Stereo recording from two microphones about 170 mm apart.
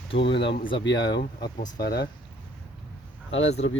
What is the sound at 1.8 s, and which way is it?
Speech, 70° left (ahead or behind).